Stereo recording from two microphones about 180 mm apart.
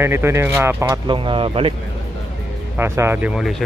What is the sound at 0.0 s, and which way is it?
Speech, 15° right (ahead or behind).